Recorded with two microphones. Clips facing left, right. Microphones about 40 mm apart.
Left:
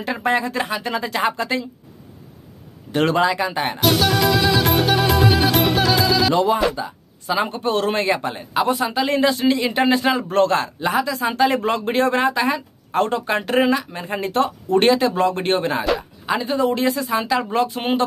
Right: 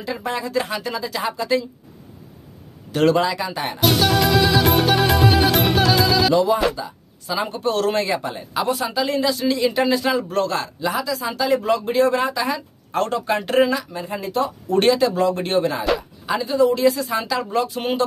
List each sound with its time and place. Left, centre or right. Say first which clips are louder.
0.0 s a man's voice: left 5 dB; left
2.9 s speech: even; left
3.8 s music: even; centre
6.8 s speech: left 3 dB; left
8.4 s a man's voice: left 3 dB; left
13.9 s speech: left 2 dB; left
14.7 s a man's voice: even; left
16.0 s a sound: left 1 dB; left
16.4 s a man's voice: right 4 dB; left
17.0 s speech: left 2 dB; centre
17.5 s a man's voice: left 2 dB; left